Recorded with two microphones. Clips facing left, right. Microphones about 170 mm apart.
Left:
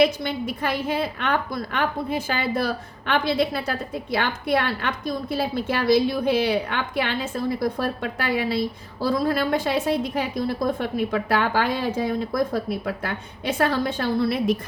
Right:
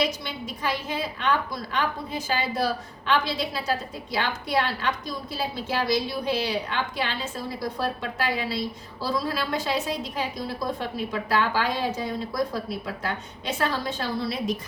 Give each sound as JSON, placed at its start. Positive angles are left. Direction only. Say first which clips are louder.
{"t": 0.0, "sound": "a woman's voice", "louder": "left 7 dB", "side_deg": 55}